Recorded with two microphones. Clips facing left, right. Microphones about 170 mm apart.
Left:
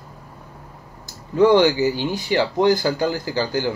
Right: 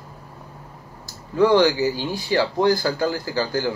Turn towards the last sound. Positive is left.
turn(degrees=20)  # may be behind; listen again after turning